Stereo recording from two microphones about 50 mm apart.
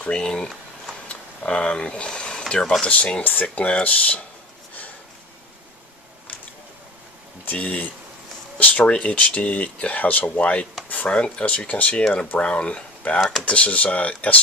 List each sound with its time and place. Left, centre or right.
0.0 s speech: centre
1.5 s speech: centre
7.5 s speech: left